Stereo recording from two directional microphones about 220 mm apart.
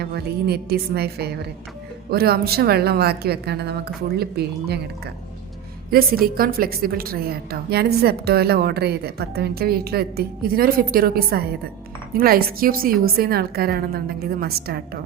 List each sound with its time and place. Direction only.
0.0 s a woman's voice: 45° right (ahead or behind)
5.9 s a woman's voice: 40° right (ahead or behind)